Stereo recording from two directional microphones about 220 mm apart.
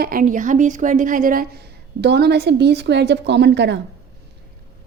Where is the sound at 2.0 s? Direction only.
50° right (ahead or behind).